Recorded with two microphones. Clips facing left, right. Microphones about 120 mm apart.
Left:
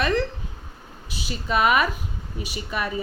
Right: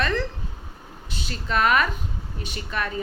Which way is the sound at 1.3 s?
10° left (ahead or behind).